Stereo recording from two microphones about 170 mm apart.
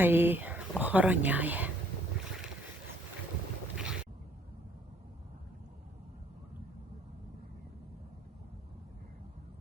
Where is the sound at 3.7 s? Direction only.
5° right (ahead or behind).